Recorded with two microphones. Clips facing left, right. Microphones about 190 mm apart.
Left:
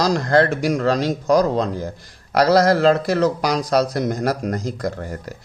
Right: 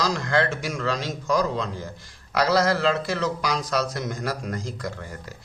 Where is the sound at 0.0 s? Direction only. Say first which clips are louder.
Left 7 dB; 35° left (ahead or behind).